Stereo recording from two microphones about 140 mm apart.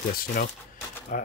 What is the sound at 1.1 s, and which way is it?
Speech, 70° left (ahead or behind).